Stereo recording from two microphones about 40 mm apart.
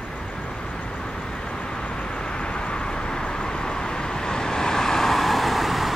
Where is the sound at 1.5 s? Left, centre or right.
Centre.